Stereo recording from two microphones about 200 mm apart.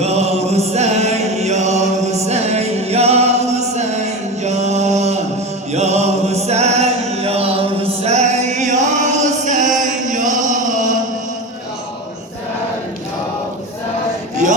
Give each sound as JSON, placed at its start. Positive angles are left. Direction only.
{"t": 0.0, "sound": "chant", "side_deg": -30}
{"t": 4.4, "sound": "mantra", "side_deg": -35}
{"t": 5.7, "sound": "music", "side_deg": -35}
{"t": 9.7, "sound": "chant", "side_deg": -40}